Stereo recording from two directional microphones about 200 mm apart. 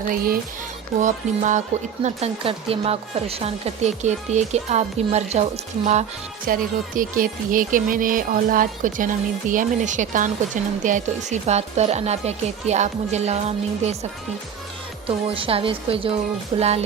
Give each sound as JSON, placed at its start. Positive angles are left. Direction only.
{"t": 0.9, "sound": "speech", "side_deg": -40}
{"t": 15.0, "sound": "speech", "side_deg": -25}